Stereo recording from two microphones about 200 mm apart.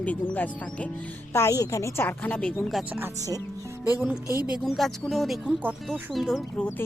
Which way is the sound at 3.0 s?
15° right (ahead or behind).